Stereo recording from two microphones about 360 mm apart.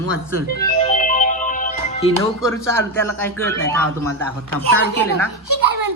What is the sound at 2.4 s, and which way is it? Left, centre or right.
A man's voice, centre.